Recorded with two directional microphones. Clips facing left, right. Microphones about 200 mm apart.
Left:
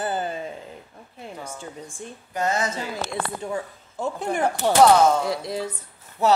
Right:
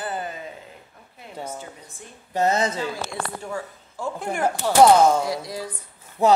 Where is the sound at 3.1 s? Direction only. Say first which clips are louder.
Left 2 dB; 20° left (ahead or behind).